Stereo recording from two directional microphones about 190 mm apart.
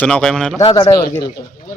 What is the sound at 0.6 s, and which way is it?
Speech, 20° left (ahead or behind).